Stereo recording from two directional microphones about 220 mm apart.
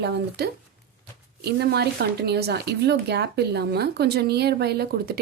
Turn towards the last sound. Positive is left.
turn(degrees=-45)  # may be behind; listen again after turning